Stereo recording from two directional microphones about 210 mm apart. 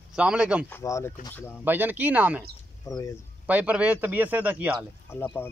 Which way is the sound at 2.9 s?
15° left (ahead or behind).